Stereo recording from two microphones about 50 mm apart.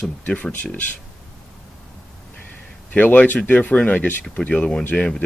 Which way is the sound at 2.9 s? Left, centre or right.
Left.